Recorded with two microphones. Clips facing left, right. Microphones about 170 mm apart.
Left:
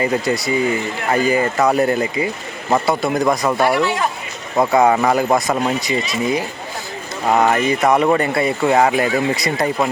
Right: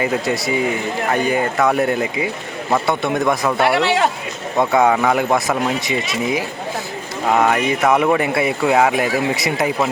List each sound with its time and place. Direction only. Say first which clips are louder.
0.0 s speech: left 1 dB; centre (ahead or behind)
3.8 s speech: right 2 dB; 75° right (ahead or behind)
4.5 s speech: left 1 dB; centre (ahead or behind)
7.3 s speech: left 1 dB; centre (ahead or behind)